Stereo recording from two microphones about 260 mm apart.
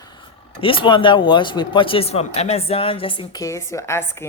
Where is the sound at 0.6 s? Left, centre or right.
Centre.